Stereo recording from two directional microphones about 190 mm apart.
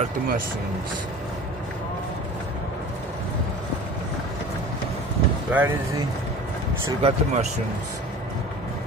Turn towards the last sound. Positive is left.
turn(degrees=-35)  # may be behind; listen again after turning